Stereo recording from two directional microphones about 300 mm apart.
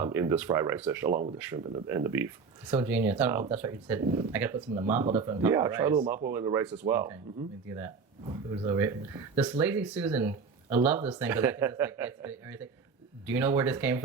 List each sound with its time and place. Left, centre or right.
0.0 s speech: centre
1.1 s speech: right
1.4 s speech: centre